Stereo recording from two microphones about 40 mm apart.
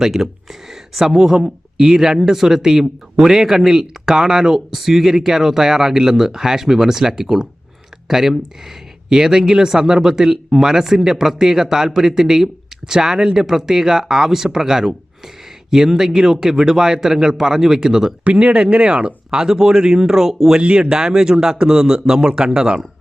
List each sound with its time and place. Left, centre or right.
0.0 s speech: centre
18.3 s speech: right; by 20.6 s centre
20.6 s speech: right